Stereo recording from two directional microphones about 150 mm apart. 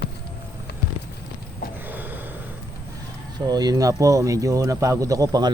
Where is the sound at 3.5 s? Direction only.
25° right (ahead or behind).